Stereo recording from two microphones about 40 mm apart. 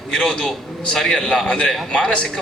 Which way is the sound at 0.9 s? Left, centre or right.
Centre.